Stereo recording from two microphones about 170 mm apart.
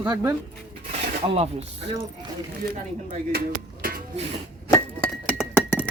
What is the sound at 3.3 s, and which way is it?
Music, 60° right (ahead or behind).